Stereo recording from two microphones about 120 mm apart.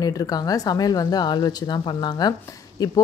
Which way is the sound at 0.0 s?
30° left (ahead or behind).